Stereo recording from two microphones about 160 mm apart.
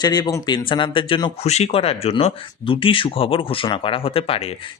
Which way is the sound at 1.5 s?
45° left (ahead or behind).